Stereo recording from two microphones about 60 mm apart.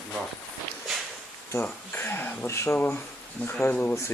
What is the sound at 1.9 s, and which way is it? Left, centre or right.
Speech, left.